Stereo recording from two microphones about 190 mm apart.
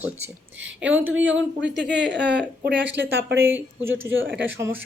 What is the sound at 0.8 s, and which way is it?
Speech, 10° right (ahead or behind).